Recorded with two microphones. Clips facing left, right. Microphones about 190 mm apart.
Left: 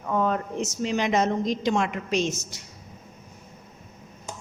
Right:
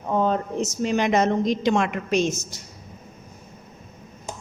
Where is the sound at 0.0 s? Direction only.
30° right (ahead or behind); by 2.6 s 45° right (ahead or behind).